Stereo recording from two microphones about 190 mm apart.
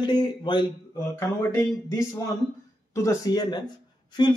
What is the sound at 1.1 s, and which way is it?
Speech, 15° left (ahead or behind).